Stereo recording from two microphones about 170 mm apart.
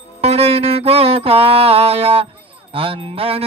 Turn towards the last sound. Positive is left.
turn(degrees=-35)  # may be behind; listen again after turning